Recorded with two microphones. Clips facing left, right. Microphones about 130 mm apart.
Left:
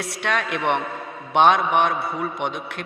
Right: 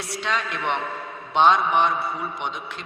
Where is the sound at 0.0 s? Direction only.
60° left (ahead or behind).